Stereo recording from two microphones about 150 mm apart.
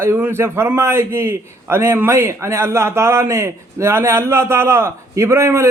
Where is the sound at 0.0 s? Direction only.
15° right (ahead or behind).